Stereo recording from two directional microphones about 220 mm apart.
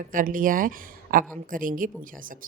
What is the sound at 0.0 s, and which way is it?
Speech, 40° right (ahead or behind).